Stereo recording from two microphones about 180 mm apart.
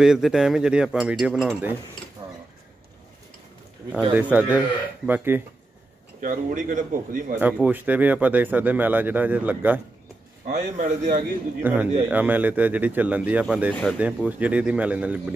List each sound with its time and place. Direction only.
0.0 s cutlery: 5° right (ahead or behind)
2.2 s a sound: 25° right (ahead or behind)
3.9 s speech: 10° right (ahead or behind)
6.2 s a man's voice: 45° right (ahead or behind)
7.6 s speech: 10° right (ahead or behind)
10.4 s a man's voice: 45° right (ahead or behind)
11.6 s speech: 10° right (ahead or behind)